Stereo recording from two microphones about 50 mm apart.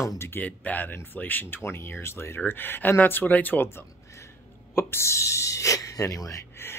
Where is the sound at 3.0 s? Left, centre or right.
Left.